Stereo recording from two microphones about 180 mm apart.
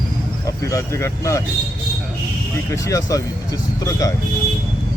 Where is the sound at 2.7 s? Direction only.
20° left (ahead or behind).